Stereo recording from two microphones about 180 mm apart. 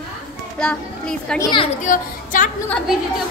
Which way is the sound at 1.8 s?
45° left (ahead or behind).